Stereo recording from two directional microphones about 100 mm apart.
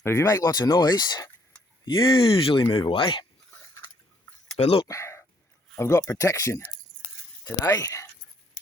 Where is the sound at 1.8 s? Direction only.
60° left (ahead or behind).